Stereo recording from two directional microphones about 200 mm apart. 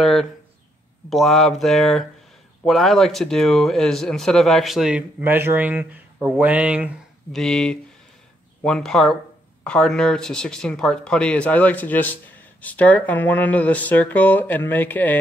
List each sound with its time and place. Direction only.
0.0 s a sound: centre (ahead or behind)
1.1 s speech: centre (ahead or behind)
7.3 s speech: 5° left (ahead or behind)